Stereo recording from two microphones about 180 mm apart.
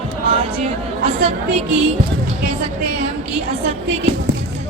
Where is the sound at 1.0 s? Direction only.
30° right (ahead or behind).